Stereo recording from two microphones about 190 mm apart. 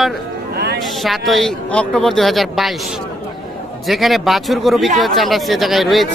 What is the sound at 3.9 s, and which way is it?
Speech, centre (ahead or behind).